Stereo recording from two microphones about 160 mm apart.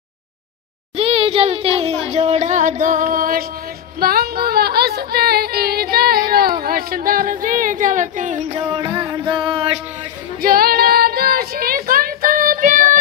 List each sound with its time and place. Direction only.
0.9 s speech: 35° right (ahead or behind); by 3.4 s 60° right (ahead or behind)
4.0 s music: 70° right (ahead or behind); by 8.5 s 50° right (ahead or behind)
8.5 s speech: 30° right (ahead or behind)
9.1 s music: 30° right (ahead or behind)
10.4 s child singing: 65° right (ahead or behind)